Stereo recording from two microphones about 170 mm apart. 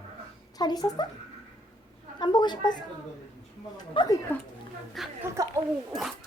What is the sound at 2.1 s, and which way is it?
Speech, 25° left (ahead or behind).